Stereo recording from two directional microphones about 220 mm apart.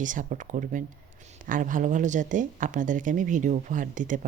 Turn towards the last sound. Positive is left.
turn(degrees=-35)  # may be behind; listen again after turning